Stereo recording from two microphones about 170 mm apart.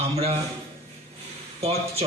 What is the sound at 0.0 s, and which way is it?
Speech, 35° right (ahead or behind).